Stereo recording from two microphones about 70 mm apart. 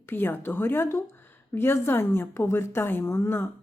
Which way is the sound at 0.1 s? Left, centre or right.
Left.